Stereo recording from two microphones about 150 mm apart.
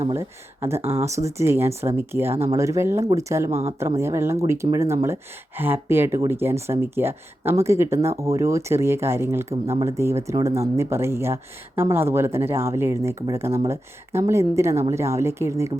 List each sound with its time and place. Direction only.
0.1 s speech: 15° right (ahead or behind)